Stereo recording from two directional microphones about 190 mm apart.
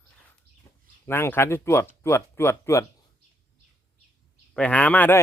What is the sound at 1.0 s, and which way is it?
Speech, 10° left (ahead or behind).